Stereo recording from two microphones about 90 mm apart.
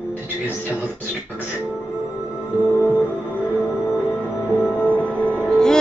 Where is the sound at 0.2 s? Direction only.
20° right (ahead or behind).